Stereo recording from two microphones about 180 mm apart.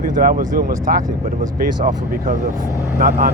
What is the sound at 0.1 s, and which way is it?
Speech, 50° right (ahead or behind).